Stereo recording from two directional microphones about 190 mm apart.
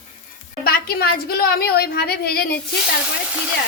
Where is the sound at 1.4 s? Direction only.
55° left (ahead or behind).